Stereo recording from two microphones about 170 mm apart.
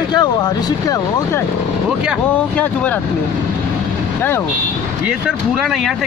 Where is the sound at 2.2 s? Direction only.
10° left (ahead or behind).